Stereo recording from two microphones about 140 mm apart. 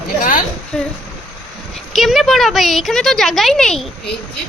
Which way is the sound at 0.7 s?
5° left (ahead or behind).